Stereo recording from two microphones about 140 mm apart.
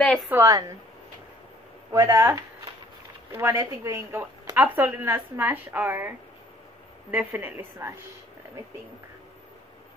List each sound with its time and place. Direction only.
0.0 s a sound: 5° left (ahead or behind)
0.3 s speech: 25° right (ahead or behind)
1.9 s speech: 25° right (ahead or behind)